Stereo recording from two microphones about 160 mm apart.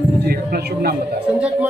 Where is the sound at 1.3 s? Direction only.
10° right (ahead or behind).